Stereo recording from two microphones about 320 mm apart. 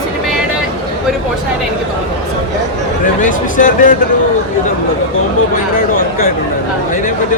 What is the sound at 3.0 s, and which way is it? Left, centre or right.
Speech, left.